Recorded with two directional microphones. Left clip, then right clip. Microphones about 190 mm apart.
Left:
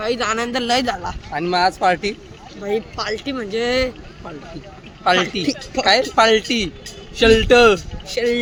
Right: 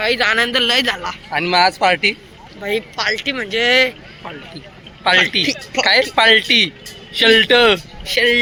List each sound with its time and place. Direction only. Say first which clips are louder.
0.0 s speech: right 5 dB; 15° left (ahead or behind)
1.3 s speech: right 4 dB; 10° right (ahead or behind)
2.6 s speech: right 3 dB; 15° left (ahead or behind)
5.0 s speech: right 4 dB; 5° left (ahead or behind)
8.0 s speech: right 6 dB; 10° left (ahead or behind)